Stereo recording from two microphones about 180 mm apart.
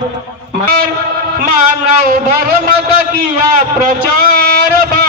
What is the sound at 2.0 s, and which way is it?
A man's voice, 50° right (ahead or behind).